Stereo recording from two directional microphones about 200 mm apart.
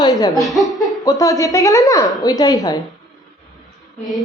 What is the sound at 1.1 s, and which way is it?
A child's voice, 15° left (ahead or behind).